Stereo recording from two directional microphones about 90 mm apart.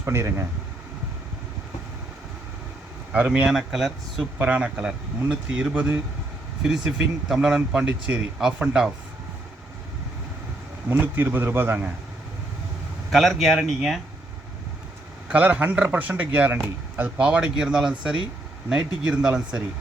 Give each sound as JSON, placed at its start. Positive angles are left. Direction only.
{"t": 0.0, "sound": "speech", "side_deg": -30}
{"t": 3.1, "sound": "speech", "side_deg": -15}
{"t": 4.4, "sound": "speech", "side_deg": -15}
{"t": 10.8, "sound": "speech", "side_deg": -25}
{"t": 13.1, "sound": "speech", "side_deg": 0}
{"t": 15.3, "sound": "speech", "side_deg": -15}